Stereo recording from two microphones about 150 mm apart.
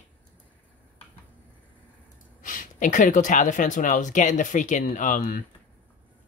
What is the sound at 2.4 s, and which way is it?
Speech, 60° left (ahead or behind).